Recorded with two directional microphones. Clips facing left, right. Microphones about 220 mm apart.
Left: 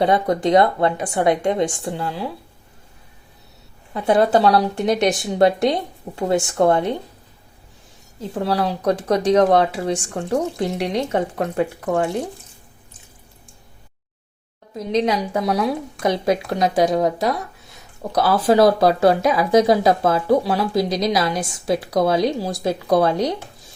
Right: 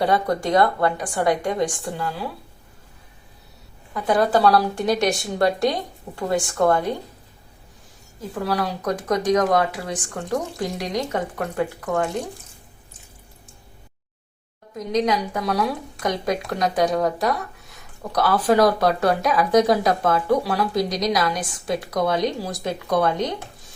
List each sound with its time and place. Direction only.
0.0 s speech: 20° left (ahead or behind)
3.9 s speech: 25° left (ahead or behind)
8.2 s speech: 25° left (ahead or behind)
14.9 s speech: 25° left (ahead or behind)